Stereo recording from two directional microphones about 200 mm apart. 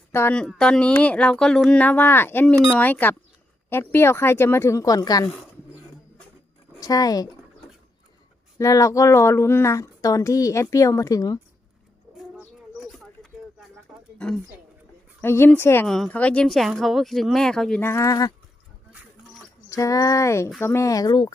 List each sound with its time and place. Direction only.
0.1 s a woman's voice: 10° left (ahead or behind)
6.7 s speech: 20° left (ahead or behind)
8.5 s a woman's voice: 15° left (ahead or behind)
13.9 s a sound: 5° right (ahead or behind)
15.2 s a woman's voice: 10° left (ahead or behind)
19.7 s a woman's voice: 15° left (ahead or behind)